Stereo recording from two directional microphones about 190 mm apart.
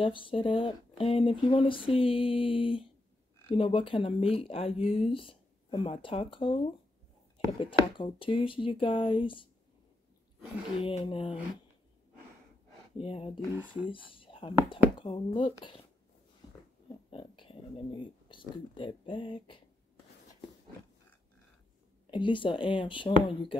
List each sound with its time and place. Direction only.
0.0 s speech: 25° left (ahead or behind)
7.6 s speech: 25° left (ahead or behind)
10.8 s speech: 30° left (ahead or behind)
12.9 s speech: 30° left (ahead or behind)
17.1 s a sound: 30° left (ahead or behind)
18.8 s speech: 25° left (ahead or behind)
22.0 s speech: 25° left (ahead or behind)